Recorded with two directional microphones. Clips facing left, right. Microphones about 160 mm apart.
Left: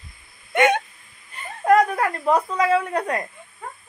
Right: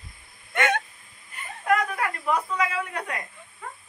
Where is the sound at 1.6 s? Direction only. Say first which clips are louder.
Left 7 dB; 40° left (ahead or behind).